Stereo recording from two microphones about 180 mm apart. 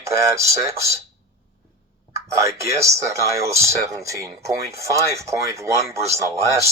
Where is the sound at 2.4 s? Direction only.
15° right (ahead or behind).